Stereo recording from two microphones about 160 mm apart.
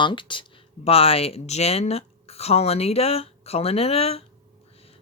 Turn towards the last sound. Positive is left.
turn(degrees=40)  # may be behind; listen again after turning